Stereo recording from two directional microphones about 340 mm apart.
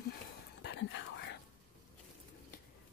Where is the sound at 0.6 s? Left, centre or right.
Left.